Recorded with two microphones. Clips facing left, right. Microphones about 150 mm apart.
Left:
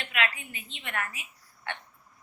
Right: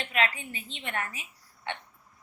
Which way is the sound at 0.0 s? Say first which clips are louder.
Right 3 dB; 30° right (ahead or behind).